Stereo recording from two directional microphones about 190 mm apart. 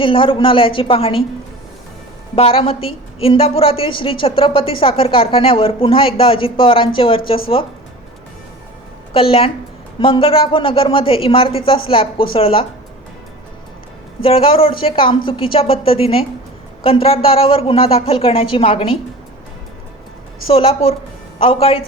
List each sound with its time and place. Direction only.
0.0 s a woman's voice: 25° left (ahead or behind)
2.3 s a woman's voice: 30° left (ahead or behind)
9.1 s a woman's voice: 30° left (ahead or behind)
14.2 s a woman's voice: 30° left (ahead or behind)
20.5 s a woman's voice: 30° left (ahead or behind)